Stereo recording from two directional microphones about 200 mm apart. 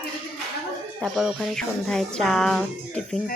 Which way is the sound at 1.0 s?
Centre (ahead or behind).